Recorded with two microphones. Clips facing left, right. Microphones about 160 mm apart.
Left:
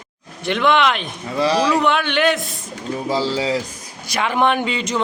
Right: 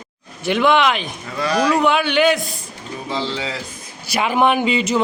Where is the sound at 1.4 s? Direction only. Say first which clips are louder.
Left 1 dB; 30° left (ahead or behind).